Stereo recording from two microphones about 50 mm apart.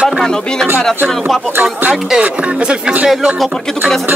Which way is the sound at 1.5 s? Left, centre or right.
Right.